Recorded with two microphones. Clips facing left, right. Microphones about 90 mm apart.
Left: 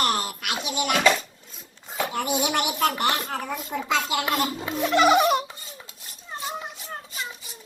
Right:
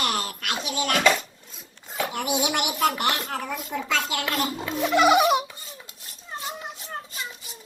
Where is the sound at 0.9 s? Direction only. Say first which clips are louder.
Even; centre (ahead or behind).